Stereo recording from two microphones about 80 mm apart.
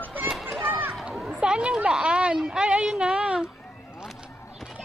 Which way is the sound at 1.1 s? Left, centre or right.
Centre.